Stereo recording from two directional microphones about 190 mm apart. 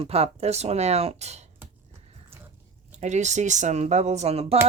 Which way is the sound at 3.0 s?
40° right (ahead or behind).